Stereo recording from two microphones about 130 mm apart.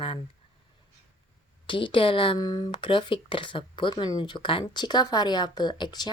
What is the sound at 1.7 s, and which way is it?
Speech, 40° left (ahead or behind).